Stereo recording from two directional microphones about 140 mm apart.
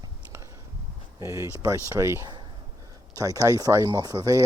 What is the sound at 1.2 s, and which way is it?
Speech, 20° right (ahead or behind).